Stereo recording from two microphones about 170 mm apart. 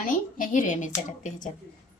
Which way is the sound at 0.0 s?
50° left (ahead or behind).